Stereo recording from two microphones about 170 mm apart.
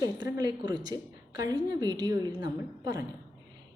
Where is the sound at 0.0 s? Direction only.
20° right (ahead or behind).